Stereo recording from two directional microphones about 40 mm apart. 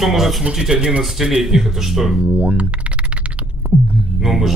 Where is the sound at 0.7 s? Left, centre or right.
Right.